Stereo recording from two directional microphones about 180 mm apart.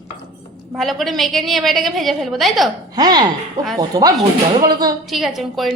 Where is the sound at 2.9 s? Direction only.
20° right (ahead or behind).